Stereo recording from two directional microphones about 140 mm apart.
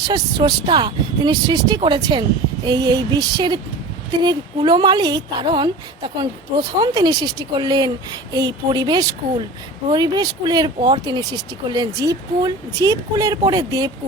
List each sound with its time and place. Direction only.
0.1 s a woman's voice: 35° right (ahead or behind)